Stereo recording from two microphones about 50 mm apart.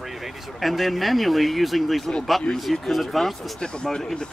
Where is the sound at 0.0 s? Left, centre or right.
Centre.